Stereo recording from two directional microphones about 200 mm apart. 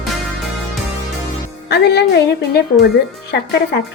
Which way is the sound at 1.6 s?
55° left (ahead or behind).